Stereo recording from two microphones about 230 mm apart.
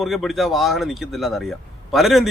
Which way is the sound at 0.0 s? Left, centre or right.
Centre.